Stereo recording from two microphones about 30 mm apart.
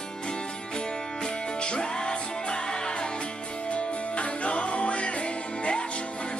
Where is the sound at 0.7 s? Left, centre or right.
Left.